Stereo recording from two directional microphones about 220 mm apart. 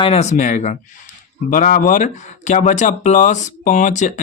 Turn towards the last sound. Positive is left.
turn(degrees=35)  # may be behind; listen again after turning